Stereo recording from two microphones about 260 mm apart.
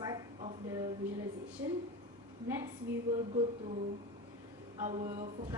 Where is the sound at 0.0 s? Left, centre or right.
Centre.